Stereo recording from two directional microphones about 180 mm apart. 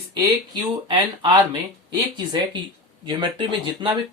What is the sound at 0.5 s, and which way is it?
Speech, 25° right (ahead or behind).